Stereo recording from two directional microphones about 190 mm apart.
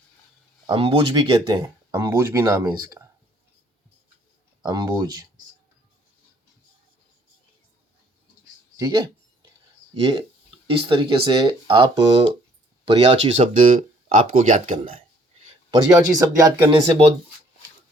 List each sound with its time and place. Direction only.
0.7 s speech: 25° right (ahead or behind)
4.6 s speech: 20° right (ahead or behind)
8.7 s a sound: 20° right (ahead or behind)
9.9 s speech: 25° right (ahead or behind); by 14.8 s 40° right (ahead or behind)
14.9 s speech: 25° right (ahead or behind)